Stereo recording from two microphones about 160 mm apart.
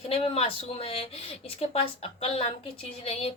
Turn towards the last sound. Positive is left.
turn(degrees=40)  # may be behind; listen again after turning